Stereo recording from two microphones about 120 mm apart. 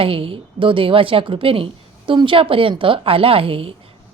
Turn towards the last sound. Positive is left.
turn(degrees=-50)  # may be behind; listen again after turning